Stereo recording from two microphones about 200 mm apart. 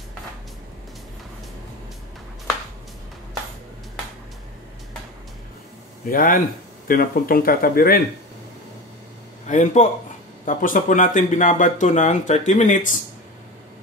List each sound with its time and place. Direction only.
6.0 s speech: 45° left (ahead or behind)
9.5 s speech: 35° left (ahead or behind)